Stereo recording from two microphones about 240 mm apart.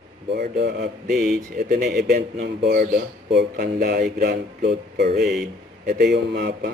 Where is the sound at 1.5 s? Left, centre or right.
Right.